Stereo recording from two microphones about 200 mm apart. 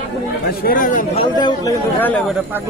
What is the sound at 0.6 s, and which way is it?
Speech, 45° left (ahead or behind).